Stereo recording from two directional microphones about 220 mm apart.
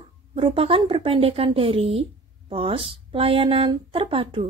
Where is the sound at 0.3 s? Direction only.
25° right (ahead or behind).